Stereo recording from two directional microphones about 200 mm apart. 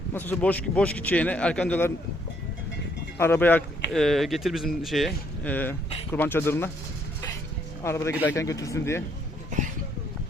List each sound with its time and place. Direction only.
0.1 s a man's voice: 10° left (ahead or behind)
3.2 s a man's voice: 10° left (ahead or behind)
7.9 s a man's voice: 15° left (ahead or behind)